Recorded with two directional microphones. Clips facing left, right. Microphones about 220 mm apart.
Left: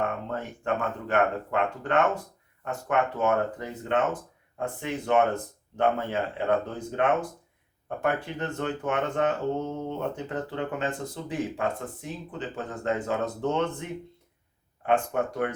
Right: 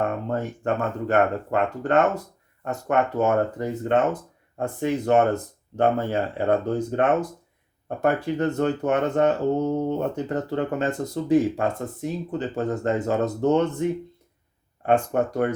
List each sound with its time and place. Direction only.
0.3 s speech: 40° right (ahead or behind)
14.8 s speech: 40° right (ahead or behind)